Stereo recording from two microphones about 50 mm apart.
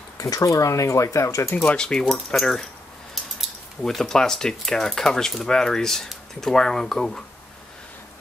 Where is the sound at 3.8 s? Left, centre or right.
Centre.